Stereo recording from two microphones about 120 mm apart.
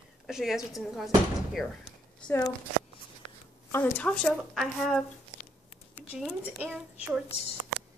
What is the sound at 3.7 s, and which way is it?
Speech, 15° left (ahead or behind).